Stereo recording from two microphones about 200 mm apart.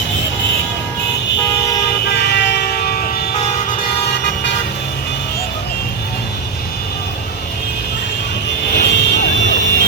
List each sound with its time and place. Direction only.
2.3 s music: 55° left (ahead or behind)
8.7 s vehicle: 55° left (ahead or behind)